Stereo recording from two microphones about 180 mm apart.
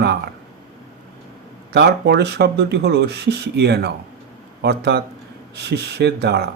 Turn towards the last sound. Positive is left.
turn(degrees=-65)  # may be behind; listen again after turning